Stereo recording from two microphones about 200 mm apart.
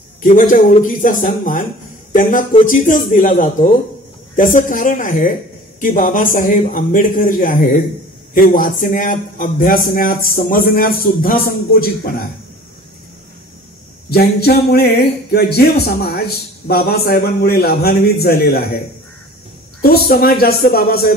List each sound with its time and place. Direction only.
0.2 s speech: 40° left (ahead or behind)
2.6 s speech: 40° left (ahead or behind)
14.1 s speech: 50° left (ahead or behind)
19.8 s speech: 50° left (ahead or behind)